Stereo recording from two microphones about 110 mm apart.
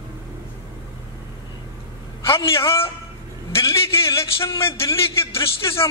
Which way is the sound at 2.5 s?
25° left (ahead or behind).